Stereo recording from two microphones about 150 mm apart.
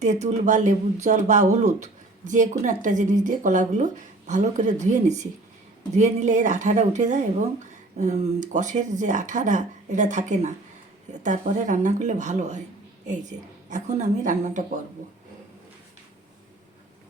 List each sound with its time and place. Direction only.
0.0 s a woman's voice: 50° right (ahead or behind)